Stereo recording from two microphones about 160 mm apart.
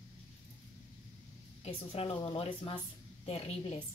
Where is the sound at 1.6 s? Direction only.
35° left (ahead or behind).